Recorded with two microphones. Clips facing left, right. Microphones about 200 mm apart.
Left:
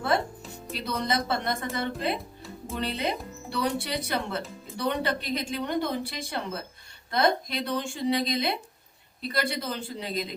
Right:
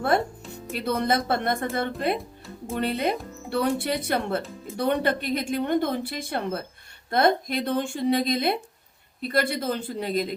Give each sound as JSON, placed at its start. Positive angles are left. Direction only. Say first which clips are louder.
{"t": 0.7, "sound": "a woman's voice", "louder": "right 5 dB", "side_deg": -55}